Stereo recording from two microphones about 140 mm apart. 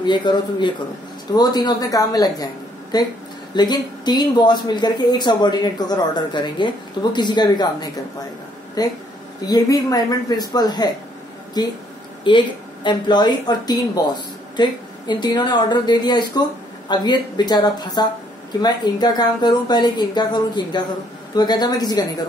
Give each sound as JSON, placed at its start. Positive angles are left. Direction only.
{"t": 0.0, "sound": "a woman's voice", "side_deg": 35}